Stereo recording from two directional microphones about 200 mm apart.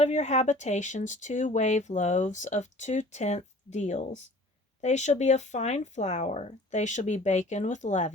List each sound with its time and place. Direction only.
0.0 s speech: 35° left (ahead or behind)